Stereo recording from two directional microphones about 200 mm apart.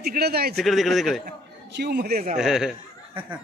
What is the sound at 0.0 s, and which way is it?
Speech, 50° right (ahead or behind).